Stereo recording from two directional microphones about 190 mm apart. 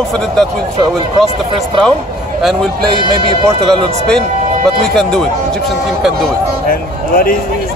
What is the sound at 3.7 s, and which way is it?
Speech, 5° left (ahead or behind).